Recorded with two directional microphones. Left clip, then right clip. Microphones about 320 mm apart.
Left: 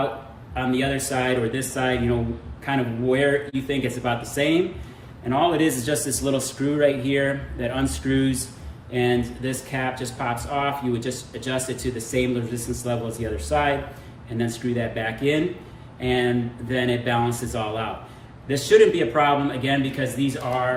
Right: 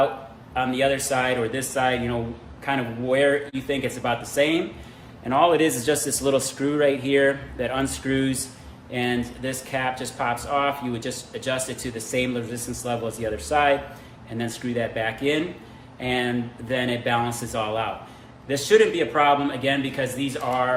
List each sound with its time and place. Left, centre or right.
0.5 s speech: centre